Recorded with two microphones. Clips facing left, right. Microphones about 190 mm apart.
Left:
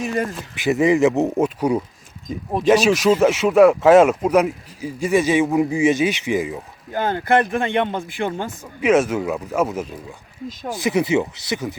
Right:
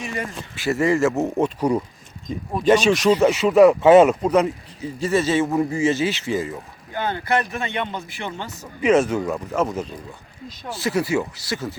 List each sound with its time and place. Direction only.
0.5 s speech: 15° left (ahead or behind)
1.4 s speech: 5° left (ahead or behind)
6.9 s speech: 45° left (ahead or behind)
8.8 s speech: 5° left (ahead or behind)
10.7 s speech: 15° left (ahead or behind)